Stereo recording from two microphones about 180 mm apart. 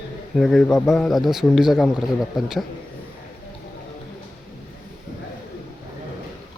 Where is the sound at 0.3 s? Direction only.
Centre (ahead or behind).